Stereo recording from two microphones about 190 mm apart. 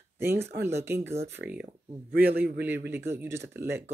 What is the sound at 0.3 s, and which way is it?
Speech, 60° right (ahead or behind).